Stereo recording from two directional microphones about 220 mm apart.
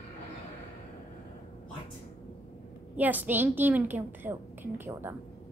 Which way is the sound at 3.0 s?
10° right (ahead or behind).